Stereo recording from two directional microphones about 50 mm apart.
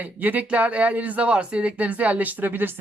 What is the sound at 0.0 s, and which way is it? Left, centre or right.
Speech, right.